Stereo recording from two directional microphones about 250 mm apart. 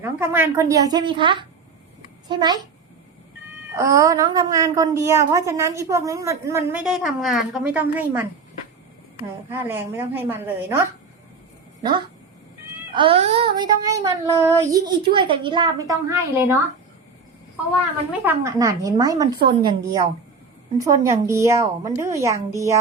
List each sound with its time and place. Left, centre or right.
0.0 s a woman's voice: centre
3.8 s a woman's voice: centre
9.5 s a woman's voice: centre
12.9 s a woman's voice: right
18.2 s a woman's voice: centre